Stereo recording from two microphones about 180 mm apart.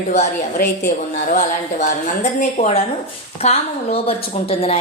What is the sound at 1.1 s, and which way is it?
Speech, 45° left (ahead or behind).